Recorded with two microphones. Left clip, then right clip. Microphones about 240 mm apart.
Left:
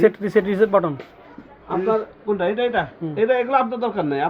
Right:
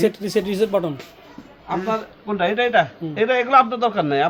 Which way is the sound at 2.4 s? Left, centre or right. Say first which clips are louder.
Right 5 dB; right.